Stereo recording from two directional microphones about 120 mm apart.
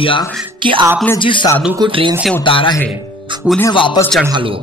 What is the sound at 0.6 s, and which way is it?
Speech, 45° right (ahead or behind).